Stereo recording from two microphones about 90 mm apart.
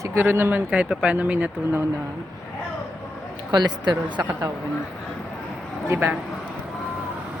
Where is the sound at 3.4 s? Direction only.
55° right (ahead or behind).